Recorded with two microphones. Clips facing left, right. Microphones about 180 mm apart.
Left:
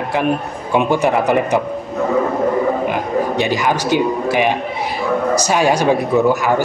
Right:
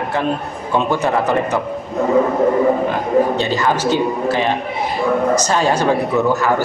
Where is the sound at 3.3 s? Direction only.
15° left (ahead or behind).